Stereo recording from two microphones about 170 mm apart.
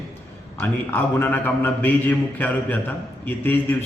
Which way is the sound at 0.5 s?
10° left (ahead or behind).